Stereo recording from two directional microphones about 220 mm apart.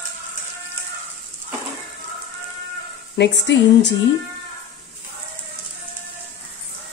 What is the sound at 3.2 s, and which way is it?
Speech, 50° left (ahead or behind).